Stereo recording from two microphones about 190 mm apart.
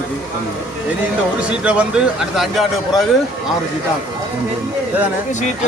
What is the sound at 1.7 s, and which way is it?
Speech, 5° right (ahead or behind).